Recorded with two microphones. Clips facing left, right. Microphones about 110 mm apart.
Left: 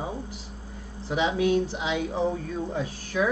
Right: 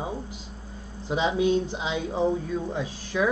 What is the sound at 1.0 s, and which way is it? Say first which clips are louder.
Speech: right 1 dB; 20° right (ahead or behind).